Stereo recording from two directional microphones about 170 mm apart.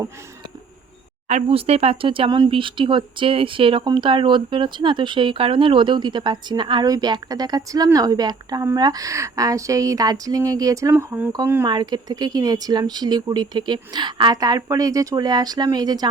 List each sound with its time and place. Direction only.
1.3 s speech: 40° right (ahead or behind); by 16.0 s 25° right (ahead or behind)